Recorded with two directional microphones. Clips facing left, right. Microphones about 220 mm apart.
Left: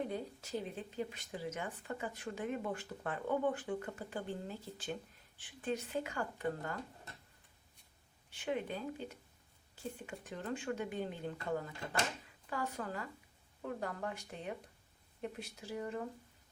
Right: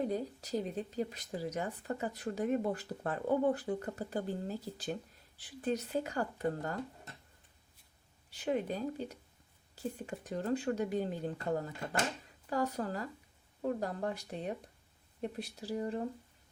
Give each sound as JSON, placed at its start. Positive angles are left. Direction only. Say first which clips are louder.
{"t": 0.1, "sound": "speech", "louder": "right 5 dB", "side_deg": -40}
{"t": 8.3, "sound": "speech", "louder": "right 4 dB", "side_deg": -40}